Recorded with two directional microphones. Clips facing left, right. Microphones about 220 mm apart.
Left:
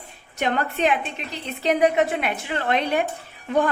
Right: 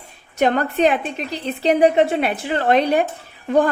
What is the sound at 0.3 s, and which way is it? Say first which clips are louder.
A woman's voice: right 6 dB; 40° right (ahead or behind).